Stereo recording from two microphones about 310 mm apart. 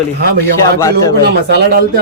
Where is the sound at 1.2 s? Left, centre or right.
Right.